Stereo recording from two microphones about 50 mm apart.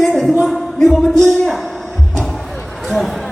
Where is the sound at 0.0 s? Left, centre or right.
Centre.